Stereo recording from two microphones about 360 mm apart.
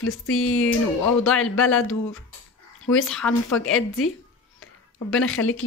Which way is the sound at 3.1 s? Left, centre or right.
Centre.